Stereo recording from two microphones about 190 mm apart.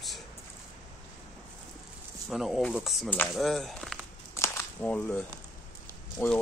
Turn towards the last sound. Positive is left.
turn(degrees=10)  # may be behind; listen again after turning